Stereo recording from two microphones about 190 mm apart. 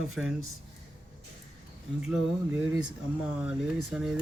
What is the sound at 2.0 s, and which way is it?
Speech, 5° right (ahead or behind).